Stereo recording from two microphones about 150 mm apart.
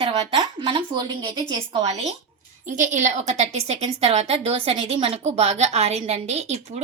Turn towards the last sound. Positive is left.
turn(degrees=-45)  # may be behind; listen again after turning